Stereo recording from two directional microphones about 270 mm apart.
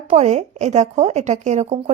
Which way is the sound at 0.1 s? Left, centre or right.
Right.